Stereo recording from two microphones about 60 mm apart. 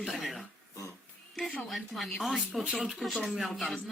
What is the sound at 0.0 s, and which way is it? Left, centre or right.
Speech, centre.